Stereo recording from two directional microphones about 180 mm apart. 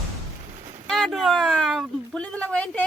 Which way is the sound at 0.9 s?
Centre (ahead or behind).